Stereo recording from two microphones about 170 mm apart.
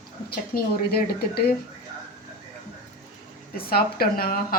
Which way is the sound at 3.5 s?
60° left (ahead or behind).